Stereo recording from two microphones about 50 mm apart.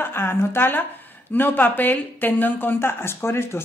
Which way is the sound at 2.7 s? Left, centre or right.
Left.